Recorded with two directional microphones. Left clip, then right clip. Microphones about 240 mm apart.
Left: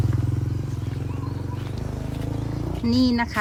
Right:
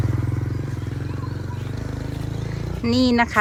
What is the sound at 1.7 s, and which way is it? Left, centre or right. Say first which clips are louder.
Vehicle: right 1 dB; left.